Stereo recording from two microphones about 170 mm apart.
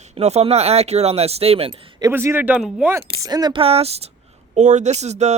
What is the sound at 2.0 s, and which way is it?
Speech, 15° right (ahead or behind).